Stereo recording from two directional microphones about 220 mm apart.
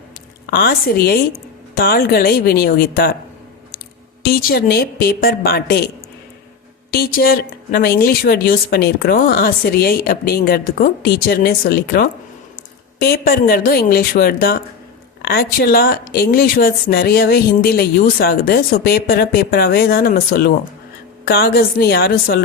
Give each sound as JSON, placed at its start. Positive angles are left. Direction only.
{"t": 0.5, "sound": "speech", "side_deg": 45}
{"t": 4.2, "sound": "speech", "side_deg": 45}
{"t": 6.9, "sound": "speech", "side_deg": 45}